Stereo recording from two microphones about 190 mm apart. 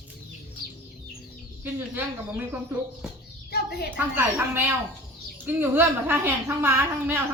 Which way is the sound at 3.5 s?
55° left (ahead or behind).